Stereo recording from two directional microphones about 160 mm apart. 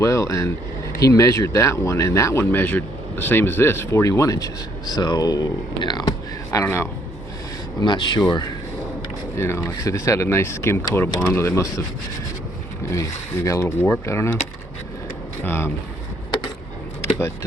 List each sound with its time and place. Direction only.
0.0 s speech: 20° left (ahead or behind)
7.8 s speech: 30° left (ahead or behind)
12.9 s speech: 20° left (ahead or behind)
15.4 s speech: 15° left (ahead or behind)